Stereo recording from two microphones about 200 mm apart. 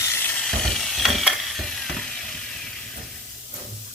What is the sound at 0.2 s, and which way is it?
Ratchet, 10° left (ahead or behind).